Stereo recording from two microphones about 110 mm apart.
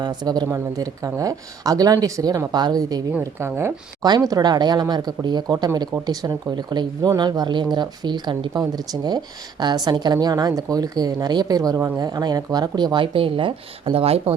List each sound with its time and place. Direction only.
0.0 s speech: 40° right (ahead or behind)
3.2 s speech: 25° right (ahead or behind)
4.0 s speech: 35° right (ahead or behind); by 14.3 s 60° right (ahead or behind)